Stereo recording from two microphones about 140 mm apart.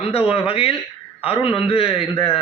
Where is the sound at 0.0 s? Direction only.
45° left (ahead or behind).